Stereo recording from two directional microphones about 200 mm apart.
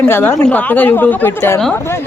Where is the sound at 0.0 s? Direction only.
10° left (ahead or behind).